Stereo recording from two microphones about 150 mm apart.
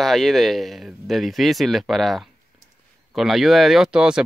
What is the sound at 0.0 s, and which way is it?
Speech, centre (ahead or behind).